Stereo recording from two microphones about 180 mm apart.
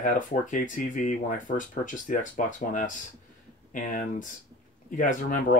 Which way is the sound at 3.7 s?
45° left (ahead or behind).